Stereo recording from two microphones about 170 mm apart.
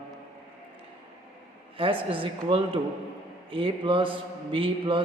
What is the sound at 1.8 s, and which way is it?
A woman's voice, 30° right (ahead or behind).